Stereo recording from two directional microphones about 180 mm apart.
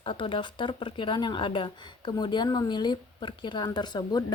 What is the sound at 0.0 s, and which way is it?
Speech, 30° left (ahead or behind).